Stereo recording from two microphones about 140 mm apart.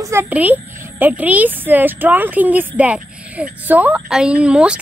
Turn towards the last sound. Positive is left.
turn(degrees=-10)  # may be behind; listen again after turning